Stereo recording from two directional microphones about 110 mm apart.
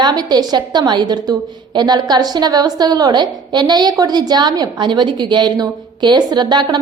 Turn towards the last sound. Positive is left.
turn(degrees=-40)  # may be behind; listen again after turning